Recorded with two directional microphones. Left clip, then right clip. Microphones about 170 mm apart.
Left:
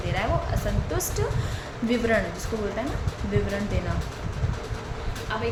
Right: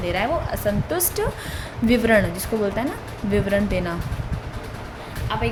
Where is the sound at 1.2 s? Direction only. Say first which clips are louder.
Right 4 dB; 45° right (ahead or behind).